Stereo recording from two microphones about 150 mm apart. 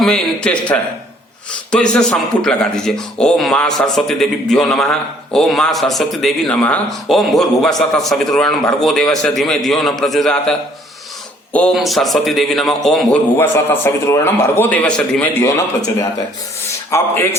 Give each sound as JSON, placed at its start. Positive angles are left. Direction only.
{"t": 0.0, "sound": "a man's voice", "side_deg": 0}
{"t": 11.5, "sound": "a man's voice", "side_deg": 5}
{"t": 13.3, "sound": "a man's voice", "side_deg": 15}
{"t": 16.9, "sound": "a man's voice", "side_deg": 20}